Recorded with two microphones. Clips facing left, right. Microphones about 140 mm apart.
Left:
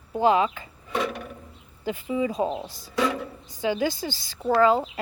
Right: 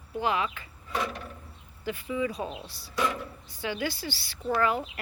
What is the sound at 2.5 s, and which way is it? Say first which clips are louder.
Speech: left 9 dB; 45° left (ahead or behind).